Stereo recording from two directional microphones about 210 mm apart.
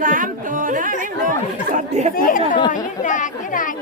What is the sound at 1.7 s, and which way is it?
Chatter, 35° right (ahead or behind).